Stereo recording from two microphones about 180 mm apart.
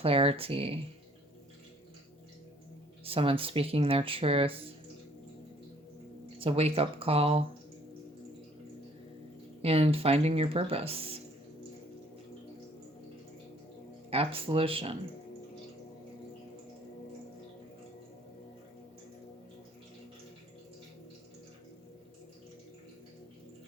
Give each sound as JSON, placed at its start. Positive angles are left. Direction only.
{"t": 0.0, "sound": "speech", "side_deg": -30}
{"t": 3.0, "sound": "speech", "side_deg": -30}
{"t": 6.4, "sound": "speech", "side_deg": -35}
{"t": 9.6, "sound": "speech", "side_deg": -35}
{"t": 14.1, "sound": "speech", "side_deg": -30}